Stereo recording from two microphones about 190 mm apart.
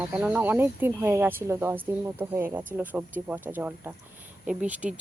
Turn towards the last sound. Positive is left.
turn(degrees=-5)  # may be behind; listen again after turning